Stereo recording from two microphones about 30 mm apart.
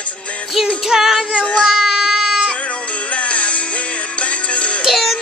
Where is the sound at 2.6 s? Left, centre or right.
Left.